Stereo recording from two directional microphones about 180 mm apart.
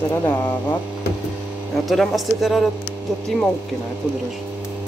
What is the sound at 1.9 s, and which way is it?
Speech, centre (ahead or behind).